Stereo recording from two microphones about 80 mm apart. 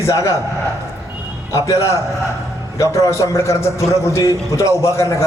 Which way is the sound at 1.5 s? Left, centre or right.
Left.